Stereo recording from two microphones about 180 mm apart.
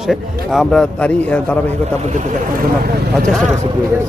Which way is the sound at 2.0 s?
40° right (ahead or behind).